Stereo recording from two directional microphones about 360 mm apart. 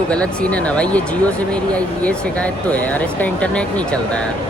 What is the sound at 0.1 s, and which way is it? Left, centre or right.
Speech, centre.